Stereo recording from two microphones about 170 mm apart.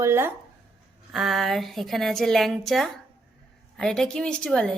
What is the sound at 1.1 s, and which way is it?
A woman's voice, centre (ahead or behind).